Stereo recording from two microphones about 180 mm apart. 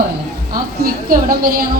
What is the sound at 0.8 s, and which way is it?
Speech, 55° right (ahead or behind).